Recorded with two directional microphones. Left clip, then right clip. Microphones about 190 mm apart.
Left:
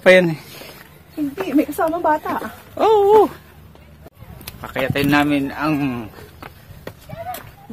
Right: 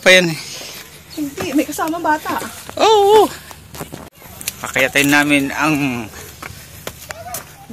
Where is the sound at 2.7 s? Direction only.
10° left (ahead or behind).